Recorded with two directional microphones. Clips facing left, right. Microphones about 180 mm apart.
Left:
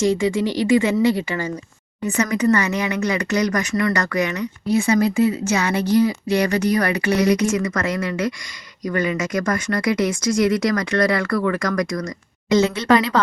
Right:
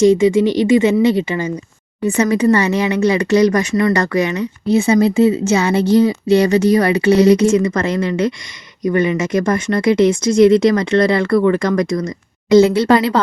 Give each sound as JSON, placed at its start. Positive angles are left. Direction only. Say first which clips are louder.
{"t": 0.0, "sound": "speech", "louder": "right 8 dB", "side_deg": -20}